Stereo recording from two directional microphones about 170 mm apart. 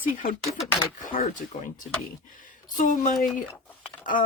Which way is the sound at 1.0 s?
50° left (ahead or behind).